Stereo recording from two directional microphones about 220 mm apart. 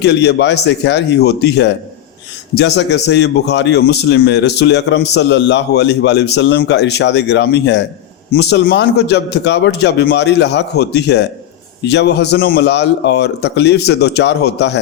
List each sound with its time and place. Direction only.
0.0 s speech: 50° left (ahead or behind)